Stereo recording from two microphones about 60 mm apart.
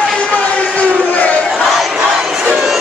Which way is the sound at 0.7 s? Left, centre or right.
Left.